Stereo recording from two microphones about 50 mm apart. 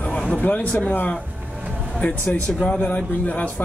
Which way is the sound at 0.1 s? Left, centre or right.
Centre.